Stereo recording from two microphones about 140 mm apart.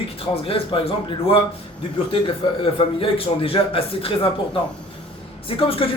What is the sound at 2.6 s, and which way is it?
A man's voice, 40° left (ahead or behind).